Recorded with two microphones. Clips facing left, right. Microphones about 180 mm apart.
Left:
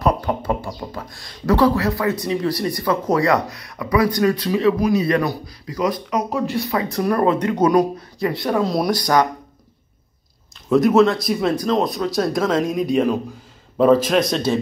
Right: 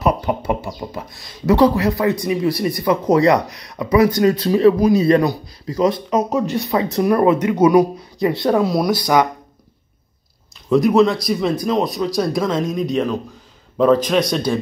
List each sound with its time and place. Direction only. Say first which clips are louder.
0.0 s bird: right 1 dB; 10° right (ahead or behind)
0.7 s speech: right 2 dB; 10° right (ahead or behind)
7.2 s speech: right 2 dB; 10° right (ahead or behind)
8.2 s speech: right 4 dB; 25° right (ahead or behind)
8.6 s speech: right 2 dB; 5° right (ahead or behind)
10.7 s a man's voice: even; centre (ahead or behind)